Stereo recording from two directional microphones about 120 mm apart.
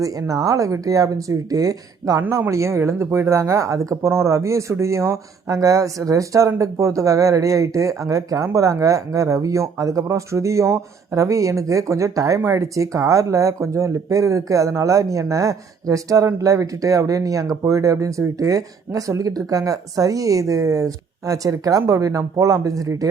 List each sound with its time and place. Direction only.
0.0 s speech: 30° right (ahead or behind)
2.2 s speech: 20° right (ahead or behind)